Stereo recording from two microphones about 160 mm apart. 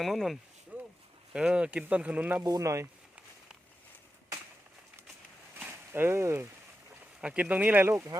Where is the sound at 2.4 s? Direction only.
20° right (ahead or behind).